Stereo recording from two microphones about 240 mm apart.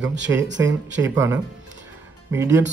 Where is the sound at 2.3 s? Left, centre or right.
Centre.